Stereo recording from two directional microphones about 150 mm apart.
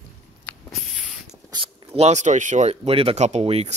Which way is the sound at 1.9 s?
50° right (ahead or behind).